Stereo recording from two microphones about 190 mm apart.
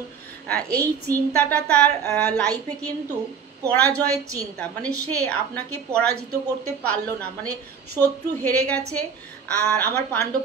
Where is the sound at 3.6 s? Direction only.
10° left (ahead or behind).